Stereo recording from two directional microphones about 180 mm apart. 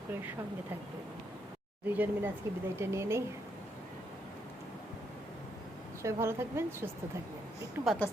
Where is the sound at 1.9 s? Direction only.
10° right (ahead or behind).